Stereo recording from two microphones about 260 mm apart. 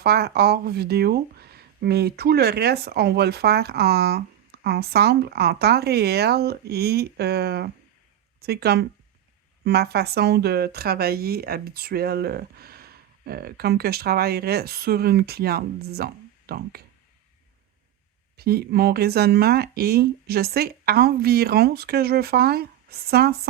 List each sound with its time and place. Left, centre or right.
0.0 s speech: right
18.3 s speech: right